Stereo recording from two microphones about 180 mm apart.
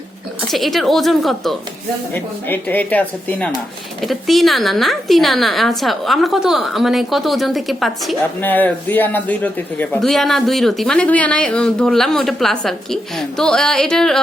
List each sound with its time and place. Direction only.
0.5 s speech: centre (ahead or behind)